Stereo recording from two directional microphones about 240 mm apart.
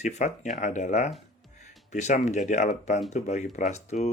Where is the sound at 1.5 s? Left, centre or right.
Left.